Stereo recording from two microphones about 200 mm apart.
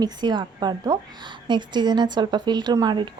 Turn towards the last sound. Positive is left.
turn(degrees=-20)  # may be behind; listen again after turning